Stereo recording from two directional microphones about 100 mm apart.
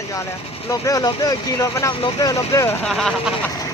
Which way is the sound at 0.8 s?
35° left (ahead or behind).